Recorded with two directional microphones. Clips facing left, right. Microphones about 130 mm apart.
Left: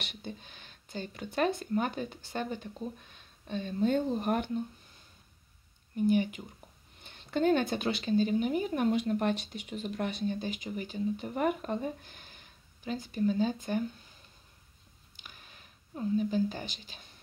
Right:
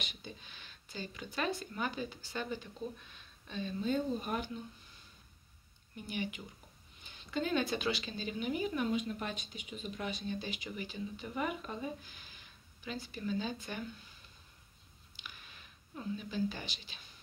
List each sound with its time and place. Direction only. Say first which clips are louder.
0.0 s speech: left 5 dB; 55° left (ahead or behind)
6.0 s speech: left 12 dB; 45° left (ahead or behind)
7.0 s speech: left 7 dB; 60° left (ahead or behind)
8.9 s speech: left 8 dB; 55° left (ahead or behind)
15.2 s a sound: even; 40° left (ahead or behind)
16.3 s speech: left 6 dB; 45° left (ahead or behind)